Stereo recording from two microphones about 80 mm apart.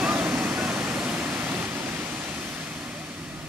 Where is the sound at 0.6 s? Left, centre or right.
Centre.